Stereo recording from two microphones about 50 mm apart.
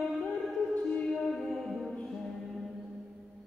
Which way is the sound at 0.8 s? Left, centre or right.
Centre.